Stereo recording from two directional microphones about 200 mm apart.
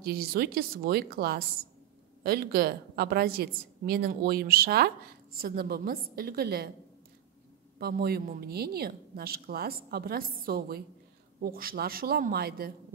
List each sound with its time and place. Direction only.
0.0 s a woman's voice: 50° right (ahead or behind)
7.8 s a woman's voice: 50° right (ahead or behind)